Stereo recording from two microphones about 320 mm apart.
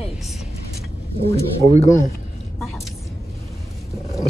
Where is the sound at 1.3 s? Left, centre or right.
Centre.